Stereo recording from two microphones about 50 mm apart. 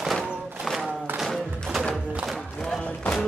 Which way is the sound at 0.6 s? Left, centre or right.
Centre.